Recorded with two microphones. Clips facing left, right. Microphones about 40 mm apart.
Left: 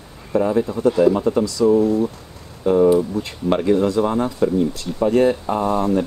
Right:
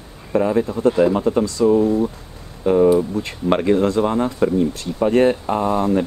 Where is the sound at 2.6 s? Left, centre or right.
Centre.